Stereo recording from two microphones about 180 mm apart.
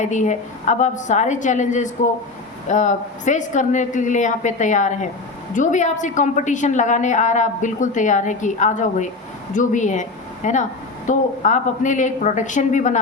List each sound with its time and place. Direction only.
0.0 s a woman's voice: 40° left (ahead or behind)